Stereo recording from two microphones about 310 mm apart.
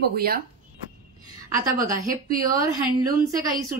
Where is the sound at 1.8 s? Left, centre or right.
Right.